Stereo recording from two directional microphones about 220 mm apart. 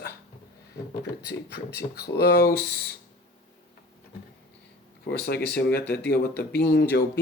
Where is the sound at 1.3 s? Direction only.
45° left (ahead or behind).